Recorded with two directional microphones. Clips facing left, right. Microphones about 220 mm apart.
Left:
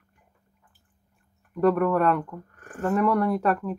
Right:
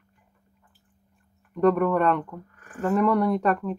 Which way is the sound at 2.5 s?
45° left (ahead or behind).